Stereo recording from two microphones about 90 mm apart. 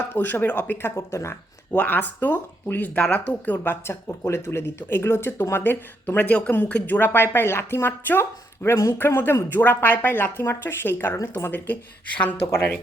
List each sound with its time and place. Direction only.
0.1 s speech: 20° left (ahead or behind)
1.7 s speech: 15° left (ahead or behind)
11.2 s speech: 35° left (ahead or behind)
11.5 s speech: 20° left (ahead or behind)
12.5 s speech: 30° left (ahead or behind)